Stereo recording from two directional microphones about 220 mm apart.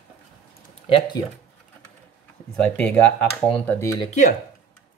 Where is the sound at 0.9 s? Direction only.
20° left (ahead or behind).